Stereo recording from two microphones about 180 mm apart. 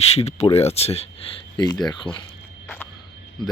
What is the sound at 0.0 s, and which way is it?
Speech, 35° left (ahead or behind).